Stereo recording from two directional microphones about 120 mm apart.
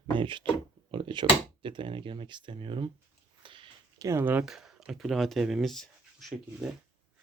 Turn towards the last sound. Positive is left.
turn(degrees=0)  # may be behind; listen again after turning